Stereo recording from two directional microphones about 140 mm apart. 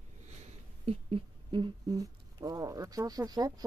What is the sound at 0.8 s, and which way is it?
Speech, 40° right (ahead or behind).